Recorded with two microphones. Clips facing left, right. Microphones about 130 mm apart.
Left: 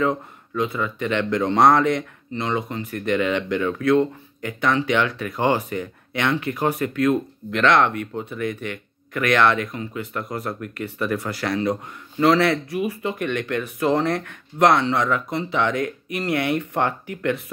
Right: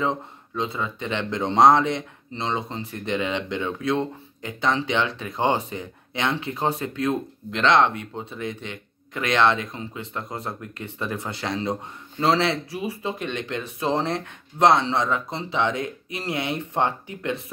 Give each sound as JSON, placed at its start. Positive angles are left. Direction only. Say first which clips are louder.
{"t": 0.0, "sound": "speech", "louder": "left 3 dB", "side_deg": -25}